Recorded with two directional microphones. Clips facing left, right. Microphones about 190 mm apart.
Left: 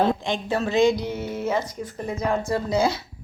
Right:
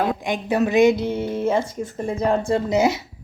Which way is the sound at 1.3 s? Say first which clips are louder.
Right 3 dB; 30° right (ahead or behind).